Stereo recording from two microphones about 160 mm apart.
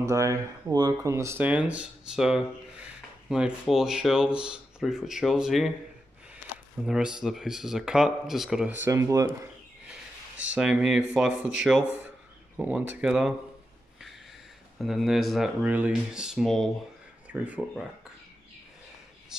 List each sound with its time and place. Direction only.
0.0 s speech: 20° right (ahead or behind); by 5.7 s 5° right (ahead or behind)
6.9 s speech: 5° right (ahead or behind)
8.8 s speech: 20° right (ahead or behind)
9.8 s speech: 5° right (ahead or behind)
14.8 s speech: centre (ahead or behind)